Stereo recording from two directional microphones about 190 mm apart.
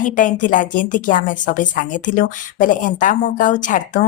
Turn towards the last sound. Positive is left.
turn(degrees=40)  # may be behind; listen again after turning